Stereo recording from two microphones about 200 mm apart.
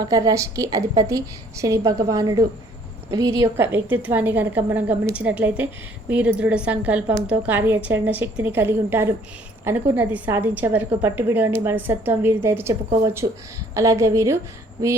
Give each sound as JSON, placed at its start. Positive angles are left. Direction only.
{"t": 0.0, "sound": "a woman's voice", "side_deg": -20}